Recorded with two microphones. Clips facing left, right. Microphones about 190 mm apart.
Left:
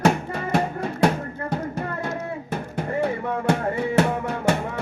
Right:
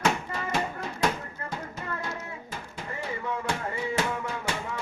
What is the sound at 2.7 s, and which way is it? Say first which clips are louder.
Music: left 11 dB; 60° left (ahead or behind).